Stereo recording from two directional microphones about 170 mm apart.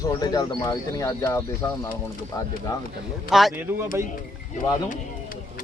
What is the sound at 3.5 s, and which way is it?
Speech, 15° right (ahead or behind).